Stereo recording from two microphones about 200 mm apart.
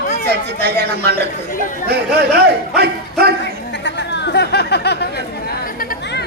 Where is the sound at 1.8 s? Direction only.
50° right (ahead or behind).